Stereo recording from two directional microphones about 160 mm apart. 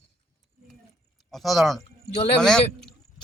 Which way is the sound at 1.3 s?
Centre (ahead or behind).